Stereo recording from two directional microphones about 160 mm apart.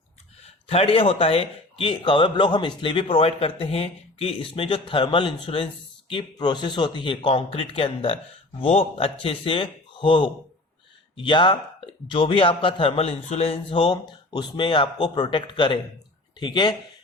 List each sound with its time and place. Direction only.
0.7 s speech: 40° left (ahead or behind)